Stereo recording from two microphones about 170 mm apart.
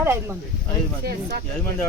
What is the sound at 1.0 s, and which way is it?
Speech, 70° right (ahead or behind).